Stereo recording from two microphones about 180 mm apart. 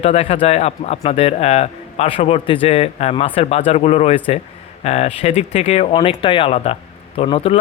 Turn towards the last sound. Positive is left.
turn(degrees=35)  # may be behind; listen again after turning